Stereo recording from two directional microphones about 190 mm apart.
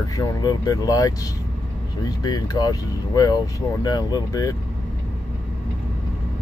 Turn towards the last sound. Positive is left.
turn(degrees=20)  # may be behind; listen again after turning